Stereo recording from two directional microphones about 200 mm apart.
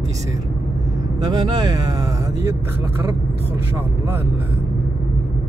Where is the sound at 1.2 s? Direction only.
20° right (ahead or behind).